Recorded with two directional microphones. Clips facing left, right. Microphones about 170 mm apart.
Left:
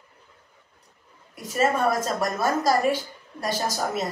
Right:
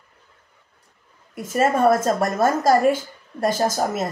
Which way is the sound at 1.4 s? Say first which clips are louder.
Right 4 dB; 50° right (ahead or behind).